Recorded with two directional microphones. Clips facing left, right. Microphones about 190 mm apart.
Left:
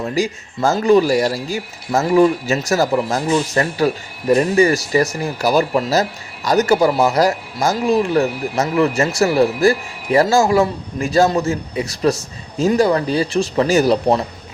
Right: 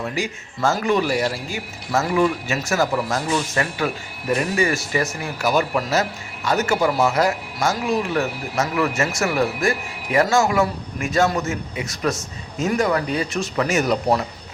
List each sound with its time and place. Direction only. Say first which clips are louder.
0.0 s speech: left 6 dB; 35° left (ahead or behind)
3.5 s speech: left 6 dB; 35° left (ahead or behind)